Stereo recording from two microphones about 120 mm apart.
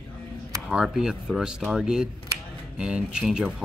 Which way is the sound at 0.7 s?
5° right (ahead or behind).